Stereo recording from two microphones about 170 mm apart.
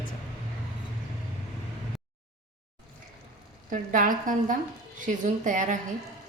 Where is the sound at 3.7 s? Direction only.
50° right (ahead or behind).